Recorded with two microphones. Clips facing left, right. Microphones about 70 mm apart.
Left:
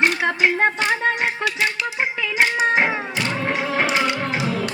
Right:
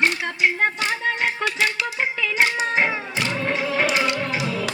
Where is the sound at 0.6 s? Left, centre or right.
Left.